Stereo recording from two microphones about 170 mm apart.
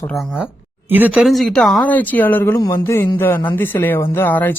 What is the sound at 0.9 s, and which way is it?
Speech, 10° right (ahead or behind).